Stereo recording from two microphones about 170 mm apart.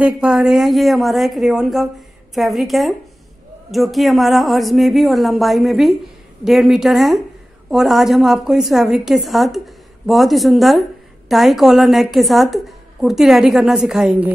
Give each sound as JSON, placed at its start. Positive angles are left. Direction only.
{"t": 0.0, "sound": "a woman's voice", "side_deg": -5}